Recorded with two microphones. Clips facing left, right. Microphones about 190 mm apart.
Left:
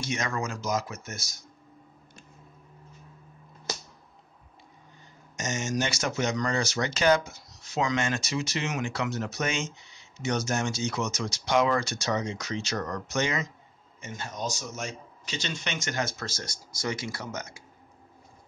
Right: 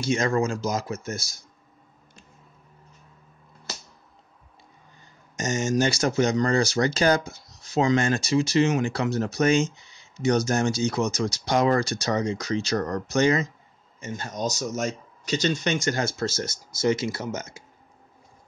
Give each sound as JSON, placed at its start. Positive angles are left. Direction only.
{"t": 0.0, "sound": "speech", "side_deg": -30}
{"t": 5.3, "sound": "speech", "side_deg": -35}